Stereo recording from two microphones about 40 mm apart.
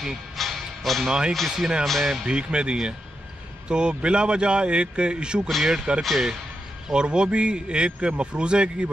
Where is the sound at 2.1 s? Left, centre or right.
Right.